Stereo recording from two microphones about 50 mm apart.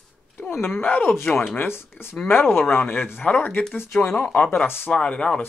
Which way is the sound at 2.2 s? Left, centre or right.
Left.